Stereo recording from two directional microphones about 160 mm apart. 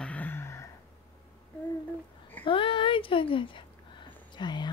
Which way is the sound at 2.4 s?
30° left (ahead or behind).